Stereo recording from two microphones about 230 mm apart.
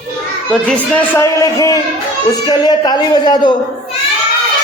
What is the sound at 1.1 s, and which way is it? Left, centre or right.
A man's voice, centre.